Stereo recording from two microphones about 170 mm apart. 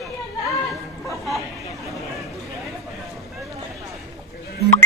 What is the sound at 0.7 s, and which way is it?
Chatter, centre (ahead or behind).